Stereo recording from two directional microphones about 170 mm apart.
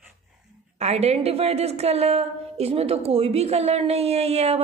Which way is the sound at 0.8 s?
40° right (ahead or behind).